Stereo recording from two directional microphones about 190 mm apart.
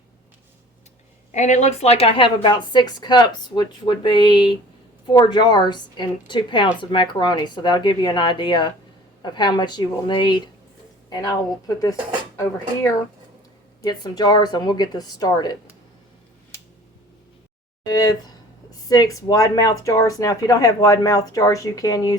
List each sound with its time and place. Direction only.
1.3 s speech: 40° left (ahead or behind); by 11.3 s 20° left (ahead or behind)
12.4 s speech: 15° left (ahead or behind)
17.8 s speech: 20° left (ahead or behind)